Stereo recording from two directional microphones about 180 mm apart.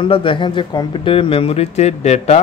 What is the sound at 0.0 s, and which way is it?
Speech, 30° left (ahead or behind).